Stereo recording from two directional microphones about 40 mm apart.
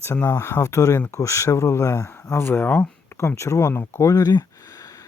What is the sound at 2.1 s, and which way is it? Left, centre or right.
Speech, left.